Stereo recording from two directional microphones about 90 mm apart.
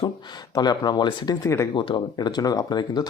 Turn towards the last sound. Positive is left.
turn(degrees=50)  # may be behind; listen again after turning